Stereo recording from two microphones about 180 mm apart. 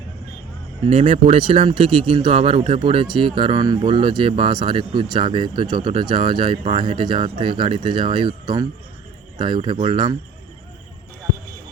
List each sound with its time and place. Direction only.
0.9 s speech: 35° right (ahead or behind)